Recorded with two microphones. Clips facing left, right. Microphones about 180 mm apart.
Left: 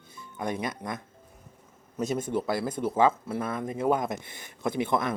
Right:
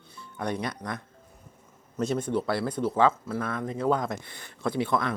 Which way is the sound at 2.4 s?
15° left (ahead or behind).